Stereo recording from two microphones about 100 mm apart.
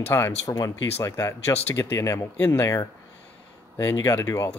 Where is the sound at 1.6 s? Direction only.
20° left (ahead or behind).